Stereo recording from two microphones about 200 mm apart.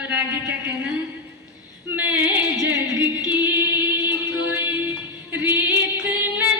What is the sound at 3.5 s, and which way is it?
Music, 10° right (ahead or behind).